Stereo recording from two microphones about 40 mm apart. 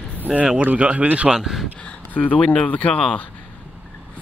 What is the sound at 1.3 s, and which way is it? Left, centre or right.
Speech, centre.